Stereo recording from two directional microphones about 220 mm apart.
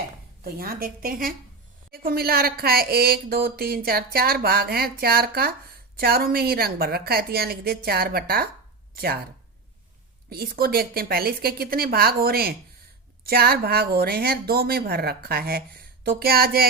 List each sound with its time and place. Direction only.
0.4 s a woman's voice: 40° right (ahead or behind)
10.2 s a woman's voice: 45° right (ahead or behind)